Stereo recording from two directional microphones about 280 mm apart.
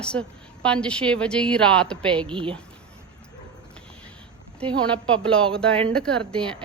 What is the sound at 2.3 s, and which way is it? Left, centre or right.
Speech, centre.